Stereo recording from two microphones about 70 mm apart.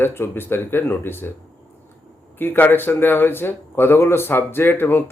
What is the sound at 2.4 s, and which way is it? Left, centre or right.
Speech, left.